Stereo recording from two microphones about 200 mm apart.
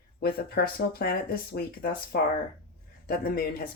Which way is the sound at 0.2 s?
50° left (ahead or behind).